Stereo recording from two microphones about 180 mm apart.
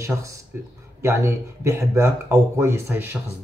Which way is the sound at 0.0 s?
15° right (ahead or behind).